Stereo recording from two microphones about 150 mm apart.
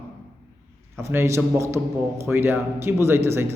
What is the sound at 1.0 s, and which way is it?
A man's voice, 15° right (ahead or behind).